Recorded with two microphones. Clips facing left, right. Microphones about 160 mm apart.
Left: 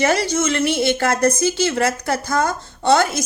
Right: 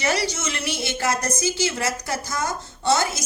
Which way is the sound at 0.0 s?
55° left (ahead or behind).